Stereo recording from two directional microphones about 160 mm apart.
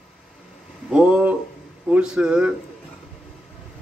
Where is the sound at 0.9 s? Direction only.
10° right (ahead or behind).